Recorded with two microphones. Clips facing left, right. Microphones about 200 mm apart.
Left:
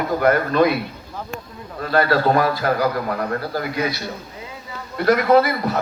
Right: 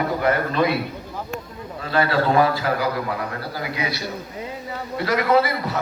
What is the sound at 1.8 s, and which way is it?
A man's voice, 40° left (ahead or behind).